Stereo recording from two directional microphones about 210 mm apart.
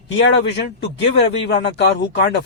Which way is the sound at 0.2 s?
55° left (ahead or behind).